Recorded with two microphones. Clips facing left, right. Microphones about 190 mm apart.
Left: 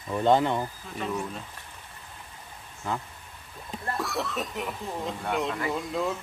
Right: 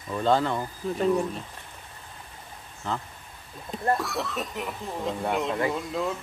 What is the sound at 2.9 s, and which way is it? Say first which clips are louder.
Speech: even; 10° left (ahead or behind).